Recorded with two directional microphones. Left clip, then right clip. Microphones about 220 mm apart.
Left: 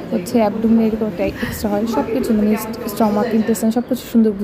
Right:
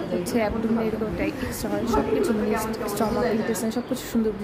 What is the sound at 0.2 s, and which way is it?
A woman's voice, 20° left (ahead or behind).